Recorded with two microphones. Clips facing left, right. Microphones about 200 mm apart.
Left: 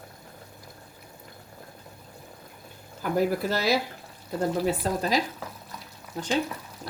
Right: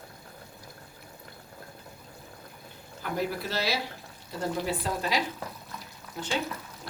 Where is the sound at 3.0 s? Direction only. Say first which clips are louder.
Left 6 dB; 45° left (ahead or behind).